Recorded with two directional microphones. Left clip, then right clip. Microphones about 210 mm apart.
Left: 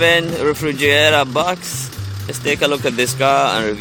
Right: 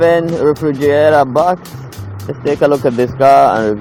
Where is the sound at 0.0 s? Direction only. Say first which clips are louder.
Right 3 dB; 20° left (ahead or behind).